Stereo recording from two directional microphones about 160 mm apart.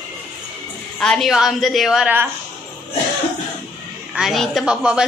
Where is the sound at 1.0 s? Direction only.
Centre (ahead or behind).